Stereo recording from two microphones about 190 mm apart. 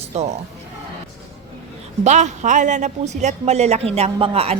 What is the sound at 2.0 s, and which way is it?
A woman's voice, 40° right (ahead or behind).